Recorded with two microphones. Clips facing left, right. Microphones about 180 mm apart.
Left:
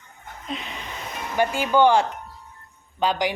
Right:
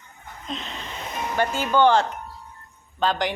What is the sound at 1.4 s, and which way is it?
Speech, 10° left (ahead or behind).